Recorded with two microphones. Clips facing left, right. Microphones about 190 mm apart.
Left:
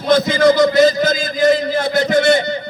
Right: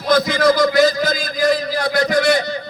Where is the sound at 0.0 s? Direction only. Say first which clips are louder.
Left 3 dB; 25° left (ahead or behind).